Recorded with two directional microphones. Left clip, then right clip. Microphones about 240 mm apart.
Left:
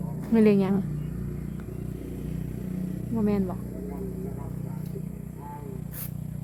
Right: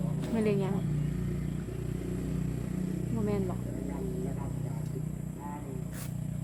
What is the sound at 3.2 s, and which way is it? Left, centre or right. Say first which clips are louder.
Speech: left 6 dB; left.